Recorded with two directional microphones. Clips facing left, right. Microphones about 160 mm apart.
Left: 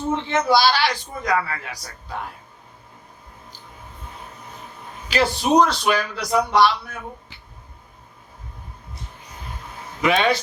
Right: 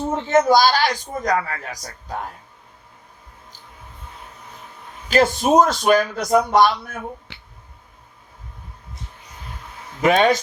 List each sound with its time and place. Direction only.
0.1 s speech: 45° right (ahead or behind)
5.0 s speech: 45° right (ahead or behind)
7.3 s clicking: 75° right (ahead or behind)
10.0 s speech: 45° right (ahead or behind)